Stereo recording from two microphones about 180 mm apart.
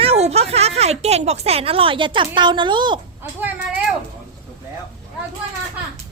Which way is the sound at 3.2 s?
10° right (ahead or behind).